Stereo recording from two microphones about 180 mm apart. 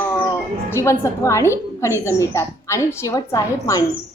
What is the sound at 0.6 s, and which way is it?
A woman's voice, 15° left (ahead or behind).